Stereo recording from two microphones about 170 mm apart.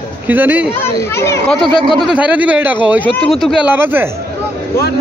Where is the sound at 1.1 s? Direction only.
15° left (ahead or behind).